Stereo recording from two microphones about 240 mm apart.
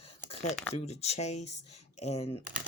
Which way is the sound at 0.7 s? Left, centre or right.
Left.